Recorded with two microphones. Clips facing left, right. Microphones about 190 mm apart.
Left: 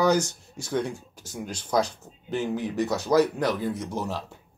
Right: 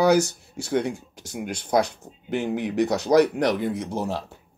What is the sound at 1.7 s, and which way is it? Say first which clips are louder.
Speech: right 3 dB; 60° right (ahead or behind).